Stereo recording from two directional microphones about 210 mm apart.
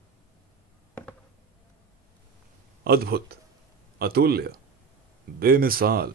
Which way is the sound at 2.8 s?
45° right (ahead or behind).